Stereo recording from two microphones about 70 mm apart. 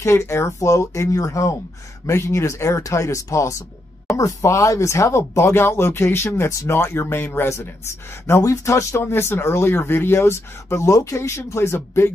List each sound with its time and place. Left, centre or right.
0.0 s speech: left